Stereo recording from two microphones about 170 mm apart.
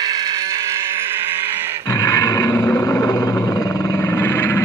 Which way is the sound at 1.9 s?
20° left (ahead or behind).